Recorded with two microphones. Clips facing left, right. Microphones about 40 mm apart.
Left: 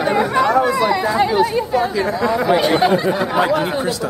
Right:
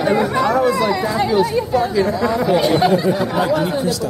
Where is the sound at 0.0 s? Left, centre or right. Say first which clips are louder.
Even; centre.